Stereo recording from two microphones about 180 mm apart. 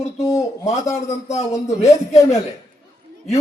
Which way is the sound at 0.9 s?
35° left (ahead or behind).